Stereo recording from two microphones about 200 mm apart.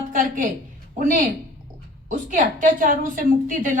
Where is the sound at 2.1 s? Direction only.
40° right (ahead or behind).